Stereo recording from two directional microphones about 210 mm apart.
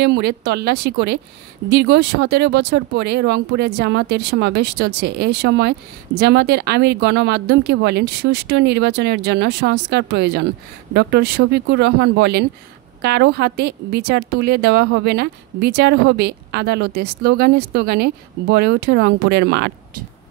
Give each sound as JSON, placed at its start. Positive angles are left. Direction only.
{"t": 0.0, "sound": "speech", "side_deg": -55}